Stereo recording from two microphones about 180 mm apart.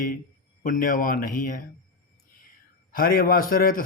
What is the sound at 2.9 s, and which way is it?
Speech, 55° left (ahead or behind).